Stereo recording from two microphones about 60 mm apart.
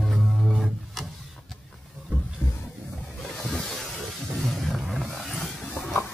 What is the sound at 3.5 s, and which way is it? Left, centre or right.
Boat, centre.